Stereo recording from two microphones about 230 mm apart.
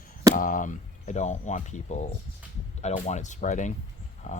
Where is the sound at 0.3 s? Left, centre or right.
Left.